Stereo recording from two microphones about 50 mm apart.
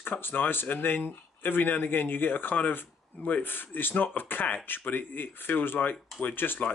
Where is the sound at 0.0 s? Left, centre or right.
Left.